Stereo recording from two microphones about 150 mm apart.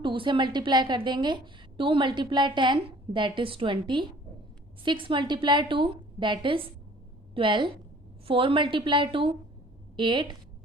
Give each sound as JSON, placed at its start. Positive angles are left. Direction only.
{"t": 0.0, "sound": "a woman's voice", "side_deg": -35}